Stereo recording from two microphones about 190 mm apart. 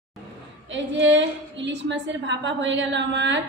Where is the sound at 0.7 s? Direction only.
75° right (ahead or behind).